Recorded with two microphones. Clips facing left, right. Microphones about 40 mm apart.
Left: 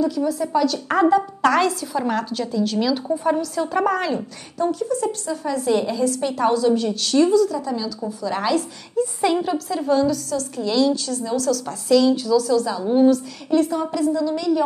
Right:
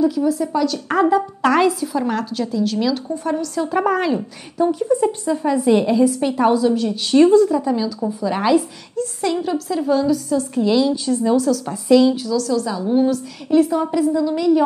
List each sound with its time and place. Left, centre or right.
0.0 s a woman's voice: centre
6.7 s a woman's voice: centre
7.1 s a woman's voice: right
7.5 s a woman's voice: centre
8.9 s a woman's voice: centre
10.3 s a woman's voice: centre
11.4 s a woman's voice: centre
12.2 s a woman's voice: centre
13.5 s a woman's voice: centre